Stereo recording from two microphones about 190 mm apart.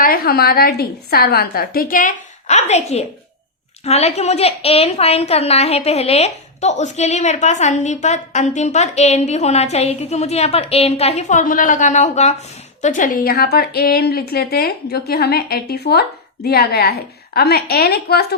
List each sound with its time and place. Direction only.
0.0 s a woman's voice: 50° left (ahead or behind)